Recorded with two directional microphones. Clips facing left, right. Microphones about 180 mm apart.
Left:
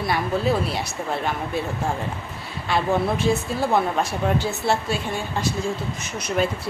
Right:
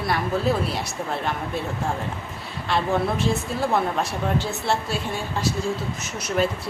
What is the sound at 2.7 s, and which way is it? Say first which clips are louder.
Speech: left 1 dB; centre (ahead or behind).